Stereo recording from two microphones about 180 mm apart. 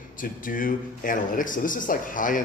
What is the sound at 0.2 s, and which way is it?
Speech, 50° left (ahead or behind).